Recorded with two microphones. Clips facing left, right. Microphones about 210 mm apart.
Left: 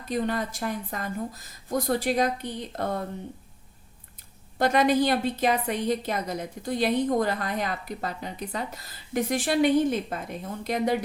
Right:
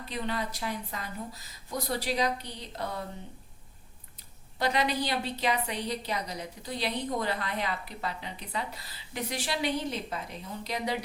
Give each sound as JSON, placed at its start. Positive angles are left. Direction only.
{"t": 0.1, "sound": "a woman's voice", "side_deg": 45}
{"t": 4.5, "sound": "a woman's voice", "side_deg": 50}